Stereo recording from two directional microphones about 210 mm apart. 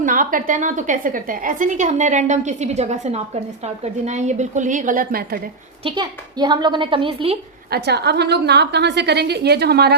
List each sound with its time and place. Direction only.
0.0 s a woman's voice: 40° right (ahead or behind)
5.8 s a woman's voice: 20° right (ahead or behind)
7.7 s a woman's voice: 50° right (ahead or behind)